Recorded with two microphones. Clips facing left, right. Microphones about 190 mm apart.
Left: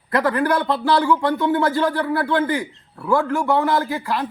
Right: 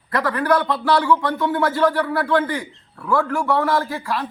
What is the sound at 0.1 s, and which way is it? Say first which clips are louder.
A man's voice: left 1 dB; 25° left (ahead or behind).